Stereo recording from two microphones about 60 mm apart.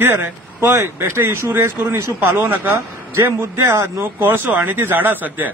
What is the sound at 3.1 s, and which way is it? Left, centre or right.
Speech, right.